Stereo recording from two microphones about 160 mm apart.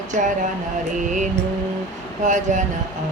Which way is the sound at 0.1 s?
55° right (ahead or behind).